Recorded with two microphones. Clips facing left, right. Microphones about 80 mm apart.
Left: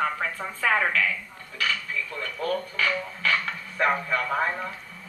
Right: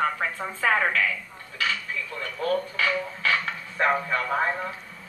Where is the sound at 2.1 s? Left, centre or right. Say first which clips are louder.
Right 3 dB; right.